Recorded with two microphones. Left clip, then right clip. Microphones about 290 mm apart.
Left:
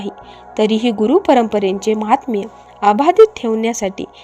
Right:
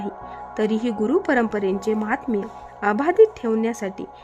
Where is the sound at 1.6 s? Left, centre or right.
Centre.